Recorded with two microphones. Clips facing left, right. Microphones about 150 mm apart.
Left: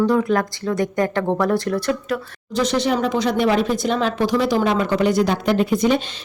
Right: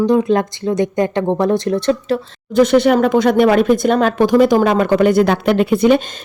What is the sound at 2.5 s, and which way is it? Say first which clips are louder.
Speech: right 8 dB; 55° right (ahead or behind).